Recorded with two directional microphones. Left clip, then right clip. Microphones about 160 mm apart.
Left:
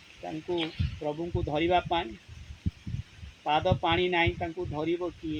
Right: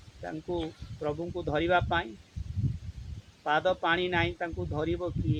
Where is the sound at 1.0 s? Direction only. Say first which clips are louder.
Even; 20° right (ahead or behind).